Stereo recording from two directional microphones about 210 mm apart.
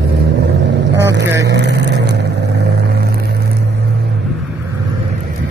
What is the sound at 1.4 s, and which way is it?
Vehicle, 55° right (ahead or behind).